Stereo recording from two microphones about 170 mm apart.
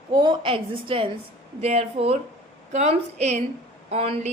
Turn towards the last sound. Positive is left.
turn(degrees=-35)  # may be behind; listen again after turning